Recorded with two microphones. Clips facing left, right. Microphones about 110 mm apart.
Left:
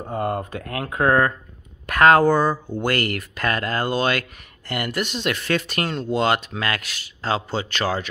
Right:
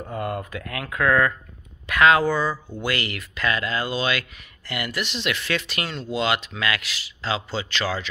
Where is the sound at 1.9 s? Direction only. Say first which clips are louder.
Left 3 dB; 45° left (ahead or behind).